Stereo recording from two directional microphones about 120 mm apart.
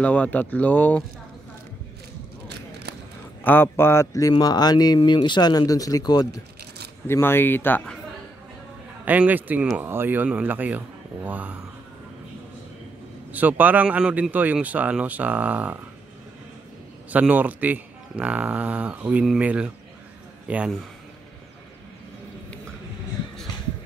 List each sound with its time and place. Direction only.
0.0 s speech: 15° left (ahead or behind)
3.4 s speech: 15° left (ahead or behind); by 6.4 s 30° left (ahead or behind)
7.1 s speech: 20° left (ahead or behind)
9.0 s speech: 15° right (ahead or behind)
13.3 s speech: 15° right (ahead or behind)
17.1 s speech: 15° right (ahead or behind)